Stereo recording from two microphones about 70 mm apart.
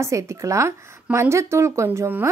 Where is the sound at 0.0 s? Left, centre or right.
Right.